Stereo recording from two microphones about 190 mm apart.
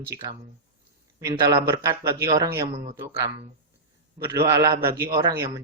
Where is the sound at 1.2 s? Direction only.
20° right (ahead or behind).